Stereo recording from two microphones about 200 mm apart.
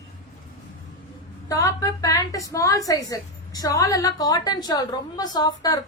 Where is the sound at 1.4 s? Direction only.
15° left (ahead or behind).